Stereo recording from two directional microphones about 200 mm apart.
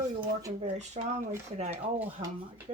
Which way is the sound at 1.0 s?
35° right (ahead or behind).